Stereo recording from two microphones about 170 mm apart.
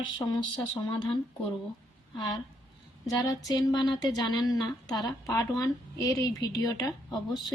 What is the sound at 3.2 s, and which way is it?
A woman's voice, 20° left (ahead or behind).